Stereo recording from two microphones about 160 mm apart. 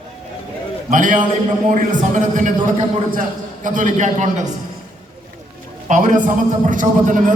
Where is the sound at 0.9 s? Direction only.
55° right (ahead or behind).